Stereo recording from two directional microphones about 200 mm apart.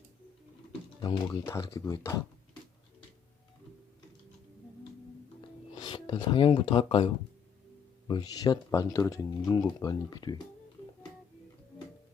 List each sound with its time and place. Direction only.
1.0 s speech: 20° left (ahead or behind)
5.4 s music: 25° left (ahead or behind)
8.0 s speech: 20° left (ahead or behind)